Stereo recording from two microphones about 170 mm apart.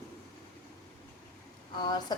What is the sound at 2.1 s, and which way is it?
Speech, 25° left (ahead or behind).